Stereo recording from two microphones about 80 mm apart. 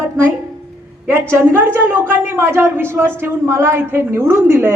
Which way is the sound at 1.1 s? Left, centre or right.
Right.